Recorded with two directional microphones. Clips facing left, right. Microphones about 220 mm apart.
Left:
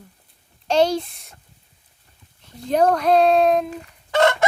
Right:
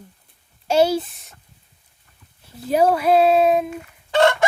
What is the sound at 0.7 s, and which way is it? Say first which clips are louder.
Speech: right 1 dB; 5° right (ahead or behind).